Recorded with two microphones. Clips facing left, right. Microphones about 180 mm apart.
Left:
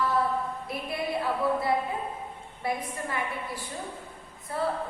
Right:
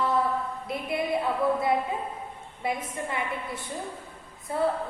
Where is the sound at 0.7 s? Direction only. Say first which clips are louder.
Right 7 dB; 20° right (ahead or behind).